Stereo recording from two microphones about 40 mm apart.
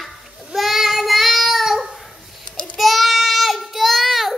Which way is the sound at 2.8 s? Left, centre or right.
Centre.